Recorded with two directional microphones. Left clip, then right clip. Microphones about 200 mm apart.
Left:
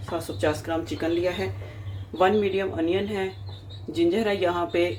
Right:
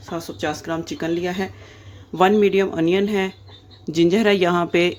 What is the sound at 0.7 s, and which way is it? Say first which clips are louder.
Speech: right 2 dB; 50° right (ahead or behind).